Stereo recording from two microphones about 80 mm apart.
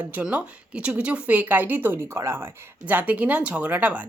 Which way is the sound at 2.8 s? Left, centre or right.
Centre.